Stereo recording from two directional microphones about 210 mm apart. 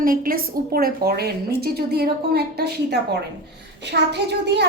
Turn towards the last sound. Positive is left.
turn(degrees=-55)  # may be behind; listen again after turning